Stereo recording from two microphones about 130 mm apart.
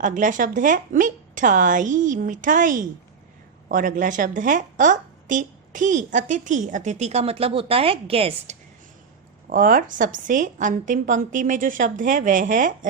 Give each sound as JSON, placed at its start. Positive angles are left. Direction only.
{"t": 0.0, "sound": "a woman's voice", "side_deg": -80}
{"t": 9.5, "sound": "a woman's voice", "side_deg": -90}